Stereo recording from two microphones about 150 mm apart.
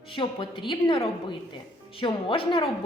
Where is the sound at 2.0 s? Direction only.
35° left (ahead or behind).